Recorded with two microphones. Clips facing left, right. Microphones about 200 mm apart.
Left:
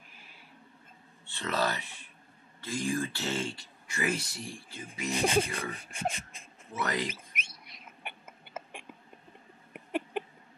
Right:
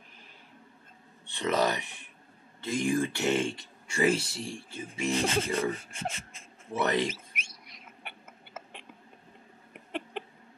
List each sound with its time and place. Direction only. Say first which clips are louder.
1.2 s speech: right 4 dB; 15° right (ahead or behind)
5.2 s speech: left 7 dB; 10° left (ahead or behind)
5.5 s speech: right 8 dB; 30° right (ahead or behind)
5.8 s speech: left 2 dB; 15° left (ahead or behind)
6.7 s speech: right 5 dB; 25° right (ahead or behind)
7.6 s whispering: left 1 dB; 20° left (ahead or behind)
10.1 s a sound: left 4 dB; 10° left (ahead or behind)